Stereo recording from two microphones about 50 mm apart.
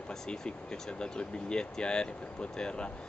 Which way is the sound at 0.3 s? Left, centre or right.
Centre.